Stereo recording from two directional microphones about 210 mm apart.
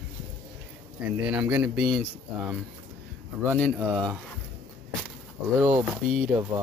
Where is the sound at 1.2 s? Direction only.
5° right (ahead or behind).